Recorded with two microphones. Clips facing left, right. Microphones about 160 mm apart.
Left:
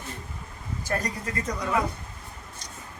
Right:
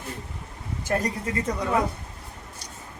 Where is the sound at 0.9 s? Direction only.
25° right (ahead or behind).